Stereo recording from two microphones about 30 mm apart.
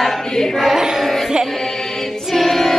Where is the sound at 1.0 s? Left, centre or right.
Centre.